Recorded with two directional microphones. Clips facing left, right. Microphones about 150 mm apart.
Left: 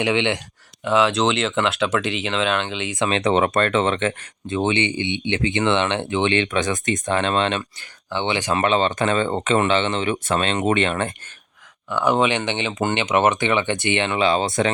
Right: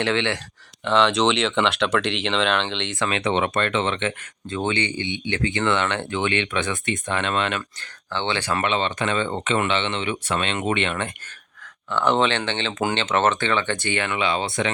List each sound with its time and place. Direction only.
0.0 s speech: 15° left (ahead or behind)
3.2 s speech: 40° left (ahead or behind)
4.4 s speech: 20° left (ahead or behind)
6.3 s speech: 35° left (ahead or behind)
7.8 s speech: 15° left (ahead or behind)
8.6 s speech: 40° left (ahead or behind)
11.9 s speech: 10° left (ahead or behind)
14.2 s speech: 35° left (ahead or behind)